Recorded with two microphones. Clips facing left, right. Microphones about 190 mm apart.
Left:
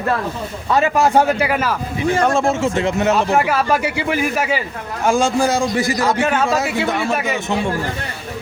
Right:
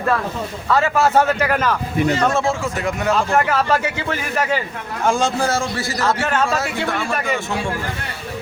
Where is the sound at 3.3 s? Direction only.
10° left (ahead or behind).